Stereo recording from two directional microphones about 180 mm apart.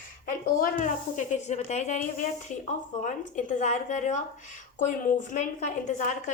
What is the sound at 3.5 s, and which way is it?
Speech, 40° left (ahead or behind).